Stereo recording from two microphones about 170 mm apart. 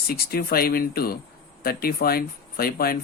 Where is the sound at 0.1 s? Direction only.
65° left (ahead or behind).